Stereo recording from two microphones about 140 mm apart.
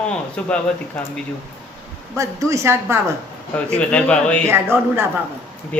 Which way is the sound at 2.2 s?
20° right (ahead or behind).